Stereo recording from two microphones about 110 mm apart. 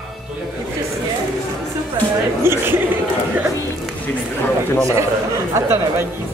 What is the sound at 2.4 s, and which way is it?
Speech, 20° right (ahead or behind).